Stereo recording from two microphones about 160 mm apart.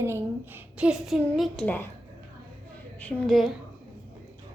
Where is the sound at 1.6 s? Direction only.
10° left (ahead or behind).